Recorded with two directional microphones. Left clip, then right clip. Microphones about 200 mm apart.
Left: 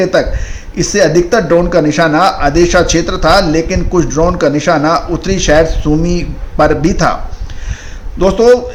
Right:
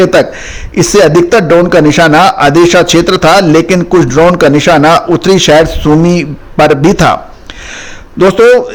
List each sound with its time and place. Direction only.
0.0 s a man's voice: 45° right (ahead or behind)